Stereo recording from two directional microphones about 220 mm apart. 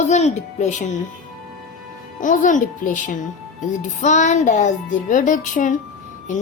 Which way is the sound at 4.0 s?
30° left (ahead or behind).